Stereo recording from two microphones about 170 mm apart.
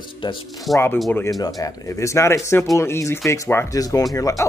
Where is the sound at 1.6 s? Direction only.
15° left (ahead or behind).